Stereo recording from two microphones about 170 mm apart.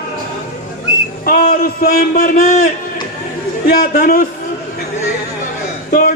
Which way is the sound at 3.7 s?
55° left (ahead or behind).